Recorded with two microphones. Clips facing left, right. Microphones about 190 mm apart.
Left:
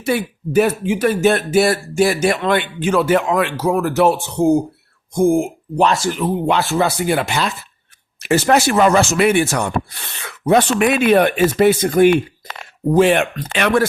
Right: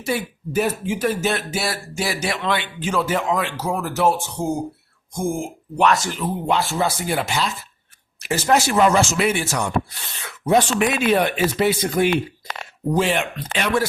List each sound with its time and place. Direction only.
0.0 s speech: 65° left (ahead or behind)
5.7 s speech: 30° left (ahead or behind)
6.1 s speech: 65° left (ahead or behind)